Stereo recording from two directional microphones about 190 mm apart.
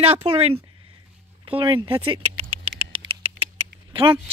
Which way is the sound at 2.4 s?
30° right (ahead or behind).